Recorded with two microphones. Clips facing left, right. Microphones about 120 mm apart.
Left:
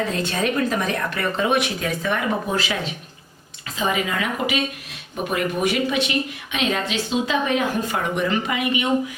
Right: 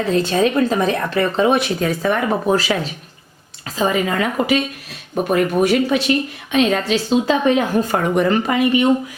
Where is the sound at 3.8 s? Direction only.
40° right (ahead or behind).